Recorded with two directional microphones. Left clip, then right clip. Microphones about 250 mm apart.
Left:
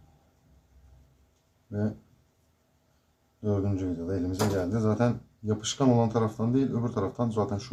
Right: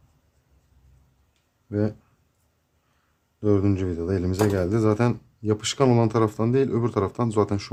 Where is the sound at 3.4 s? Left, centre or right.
Right.